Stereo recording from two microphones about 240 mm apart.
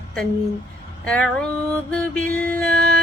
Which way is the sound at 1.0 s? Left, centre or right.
Centre.